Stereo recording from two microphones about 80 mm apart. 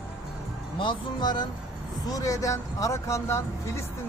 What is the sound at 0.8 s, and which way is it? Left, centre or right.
Speech, left.